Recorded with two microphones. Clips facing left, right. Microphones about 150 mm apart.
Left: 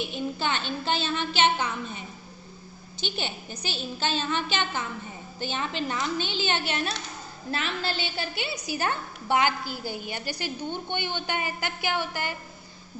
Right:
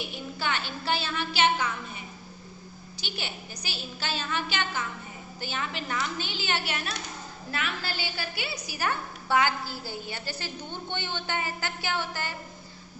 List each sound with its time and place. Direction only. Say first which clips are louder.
0.3 s speech: left 3 dB; 25° left (ahead or behind)
3.0 s a woman's voice: left 5 dB; 25° left (ahead or behind)